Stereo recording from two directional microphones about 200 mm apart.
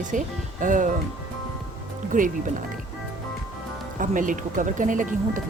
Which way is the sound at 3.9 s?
40° right (ahead or behind).